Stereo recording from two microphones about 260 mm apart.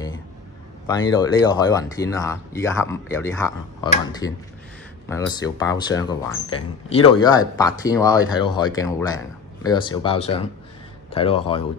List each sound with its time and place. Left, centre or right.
0.8 s speech: centre